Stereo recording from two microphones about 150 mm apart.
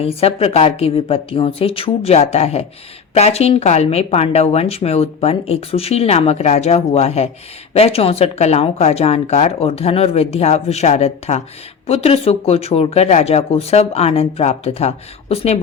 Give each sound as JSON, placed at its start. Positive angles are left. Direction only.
{"t": 0.0, "sound": "a woman's voice", "side_deg": 40}